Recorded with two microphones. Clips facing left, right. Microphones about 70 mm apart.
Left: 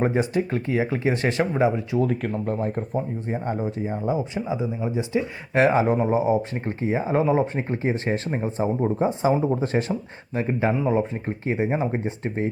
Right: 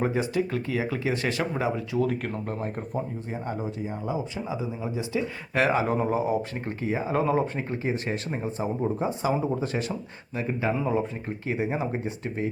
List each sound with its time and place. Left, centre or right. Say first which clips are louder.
0.0 s speech: left 3 dB; left
2.0 s speech: left 4 dB; left
9.9 s speech: left 6 dB; centre
10.3 s speech: left 4 dB; left